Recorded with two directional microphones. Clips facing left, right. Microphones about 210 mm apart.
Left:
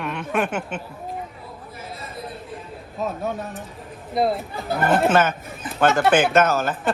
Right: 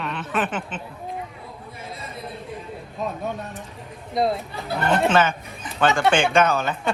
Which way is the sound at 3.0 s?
5° left (ahead or behind).